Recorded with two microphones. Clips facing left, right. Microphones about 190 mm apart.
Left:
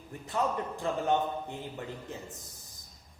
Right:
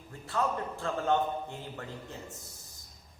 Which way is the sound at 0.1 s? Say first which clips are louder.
Left 1 dB; 20° left (ahead or behind).